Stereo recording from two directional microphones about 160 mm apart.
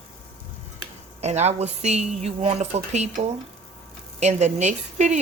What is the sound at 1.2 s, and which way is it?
A woman's voice, 45° right (ahead or behind).